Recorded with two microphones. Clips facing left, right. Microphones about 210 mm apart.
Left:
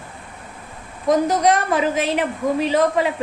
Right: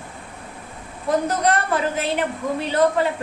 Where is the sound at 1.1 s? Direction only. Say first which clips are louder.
Left 4 dB; 90° left.